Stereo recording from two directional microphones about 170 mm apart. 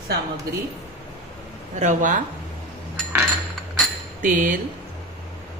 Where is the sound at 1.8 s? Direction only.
50° right (ahead or behind).